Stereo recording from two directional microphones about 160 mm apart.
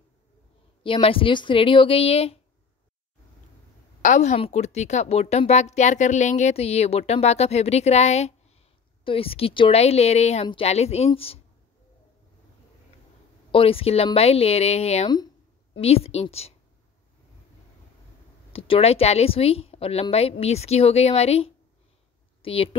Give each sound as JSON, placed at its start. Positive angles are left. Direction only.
{"t": 0.8, "sound": "a woman's voice", "side_deg": 35}
{"t": 4.0, "sound": "a woman's voice", "side_deg": 50}
{"t": 13.5, "sound": "a woman's voice", "side_deg": 35}
{"t": 18.5, "sound": "a woman's voice", "side_deg": 35}